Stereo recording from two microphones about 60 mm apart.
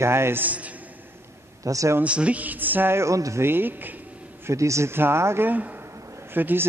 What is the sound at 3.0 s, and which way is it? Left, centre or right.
Speech, right.